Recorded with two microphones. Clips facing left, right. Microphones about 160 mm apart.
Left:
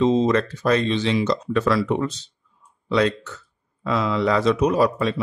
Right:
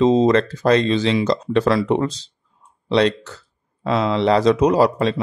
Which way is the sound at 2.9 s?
70° right (ahead or behind).